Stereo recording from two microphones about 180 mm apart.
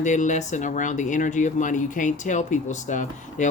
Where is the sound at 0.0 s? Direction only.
45° left (ahead or behind).